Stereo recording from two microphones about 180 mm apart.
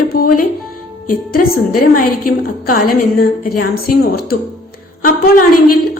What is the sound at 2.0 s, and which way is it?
A woman's voice, 50° left (ahead or behind).